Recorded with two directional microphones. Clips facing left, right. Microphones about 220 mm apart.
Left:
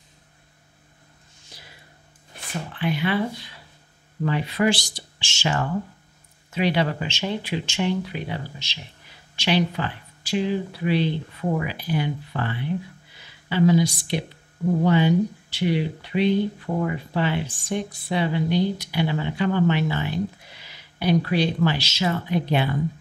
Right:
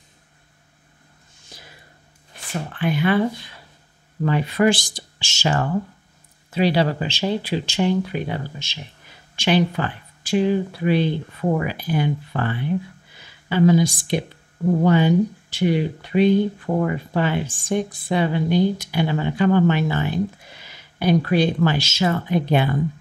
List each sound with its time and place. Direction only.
1.5 s a sound: 50° right (ahead or behind)
2.7 s speech: 50° right (ahead or behind)
4.3 s speech: 50° right (ahead or behind)